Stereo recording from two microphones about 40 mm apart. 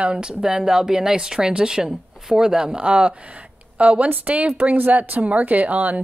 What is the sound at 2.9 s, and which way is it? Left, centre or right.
A woman's voice, right.